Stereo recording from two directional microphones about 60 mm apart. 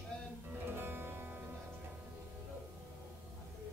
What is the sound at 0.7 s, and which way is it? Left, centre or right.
Music, right.